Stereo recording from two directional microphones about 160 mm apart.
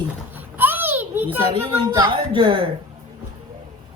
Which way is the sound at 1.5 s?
30° right (ahead or behind).